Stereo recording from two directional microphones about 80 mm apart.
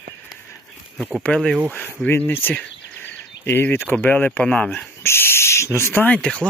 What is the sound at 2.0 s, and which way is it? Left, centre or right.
Speech, left.